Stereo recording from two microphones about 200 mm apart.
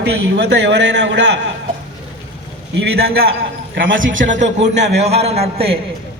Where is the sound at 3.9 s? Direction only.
70° right (ahead or behind).